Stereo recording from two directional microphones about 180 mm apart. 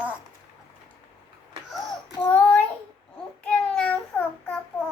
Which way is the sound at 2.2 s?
5° left (ahead or behind).